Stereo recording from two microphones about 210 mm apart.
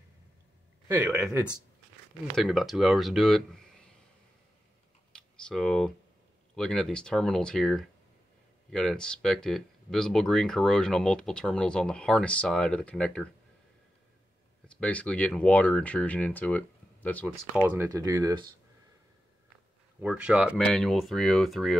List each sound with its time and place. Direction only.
0.8 s speech: 10° right (ahead or behind)
5.1 s computer keyboard: 5° left (ahead or behind)
6.5 s speech: 5° left (ahead or behind)
14.8 s speech: 5° left (ahead or behind)
17.6 s speech: 10° right (ahead or behind)
20.0 s speech: 5° right (ahead or behind)